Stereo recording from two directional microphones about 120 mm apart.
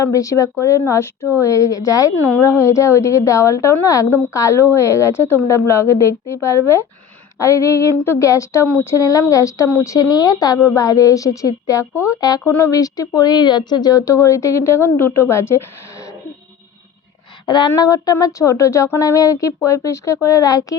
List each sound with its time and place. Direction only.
0.0 s a woman's voice: 25° left (ahead or behind)
12.5 s a woman's voice: 20° left (ahead or behind)
17.4 s a woman's voice: 40° left (ahead or behind)